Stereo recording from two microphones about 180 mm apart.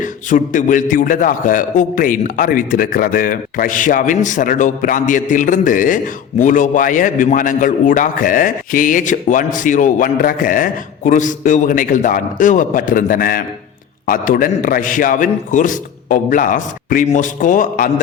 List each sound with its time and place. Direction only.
0.0 s a man's voice: 45° left (ahead or behind)